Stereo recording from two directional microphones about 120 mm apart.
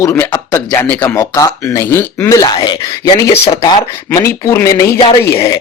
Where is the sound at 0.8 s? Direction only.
15° left (ahead or behind).